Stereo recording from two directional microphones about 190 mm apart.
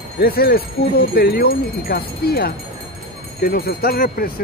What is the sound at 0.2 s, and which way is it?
Speech, 55° left (ahead or behind).